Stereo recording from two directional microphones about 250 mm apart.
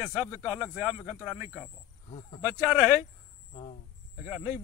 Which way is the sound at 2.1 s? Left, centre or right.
Left.